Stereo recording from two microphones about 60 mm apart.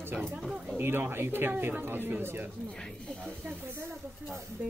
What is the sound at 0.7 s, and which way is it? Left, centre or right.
Speech, right.